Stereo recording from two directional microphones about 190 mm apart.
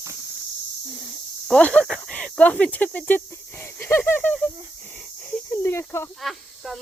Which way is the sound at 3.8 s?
10° left (ahead or behind).